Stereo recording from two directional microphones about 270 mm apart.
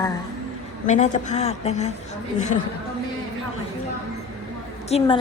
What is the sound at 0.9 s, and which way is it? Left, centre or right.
A woman's voice, left.